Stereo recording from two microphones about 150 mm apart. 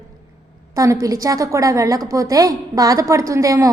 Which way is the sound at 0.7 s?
25° right (ahead or behind).